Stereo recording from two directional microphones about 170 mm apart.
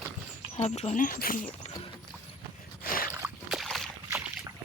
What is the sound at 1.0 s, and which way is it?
Speech, 55° left (ahead or behind).